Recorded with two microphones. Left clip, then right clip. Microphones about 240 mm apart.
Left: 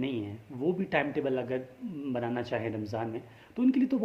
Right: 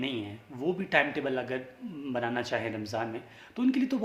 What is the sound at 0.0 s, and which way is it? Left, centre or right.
A woman's voice, centre.